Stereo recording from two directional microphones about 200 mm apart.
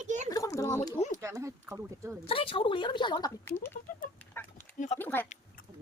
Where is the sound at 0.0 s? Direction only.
35° right (ahead or behind).